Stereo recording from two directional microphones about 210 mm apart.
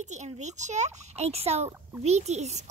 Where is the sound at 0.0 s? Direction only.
35° right (ahead or behind).